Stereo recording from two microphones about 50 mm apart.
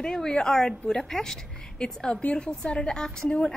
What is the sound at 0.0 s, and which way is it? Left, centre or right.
Speech, centre.